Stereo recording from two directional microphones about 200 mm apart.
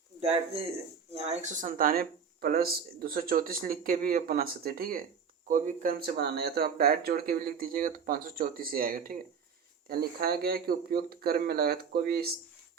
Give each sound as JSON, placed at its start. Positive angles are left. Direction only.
{"t": 0.2, "sound": "speech", "side_deg": -30}